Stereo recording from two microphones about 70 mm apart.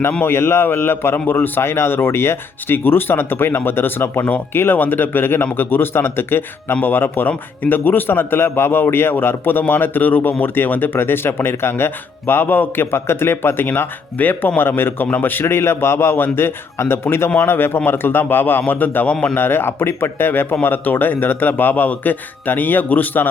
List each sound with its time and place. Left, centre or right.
0.2 s speech: left